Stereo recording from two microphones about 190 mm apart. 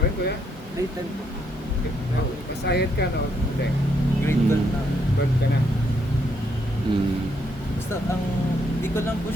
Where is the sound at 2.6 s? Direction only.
60° left (ahead or behind).